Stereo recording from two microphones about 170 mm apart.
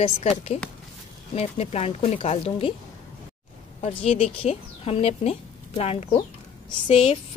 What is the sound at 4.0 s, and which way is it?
A woman's voice, 35° left (ahead or behind).